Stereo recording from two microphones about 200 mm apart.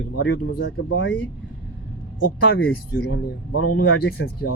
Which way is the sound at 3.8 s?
50° left (ahead or behind).